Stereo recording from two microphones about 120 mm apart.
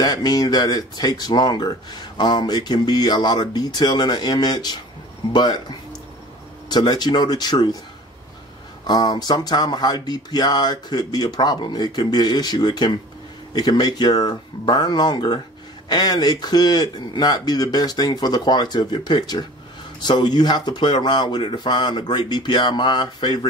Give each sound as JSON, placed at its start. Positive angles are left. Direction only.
{"t": 0.0, "sound": "speech", "side_deg": 35}
{"t": 8.8, "sound": "speech", "side_deg": 35}